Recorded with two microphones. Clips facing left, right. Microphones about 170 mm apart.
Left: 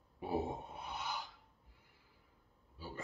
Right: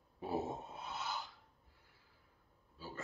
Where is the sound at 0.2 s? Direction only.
15° left (ahead or behind).